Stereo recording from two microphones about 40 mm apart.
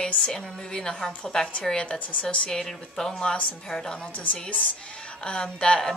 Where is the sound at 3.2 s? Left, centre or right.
Left.